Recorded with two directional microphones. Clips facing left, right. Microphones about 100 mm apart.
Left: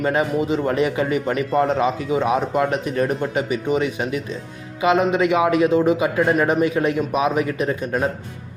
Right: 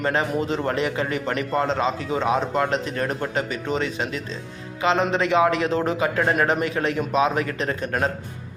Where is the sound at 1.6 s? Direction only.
25° right (ahead or behind).